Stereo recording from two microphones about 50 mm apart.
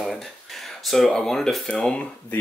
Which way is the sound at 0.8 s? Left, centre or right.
Centre.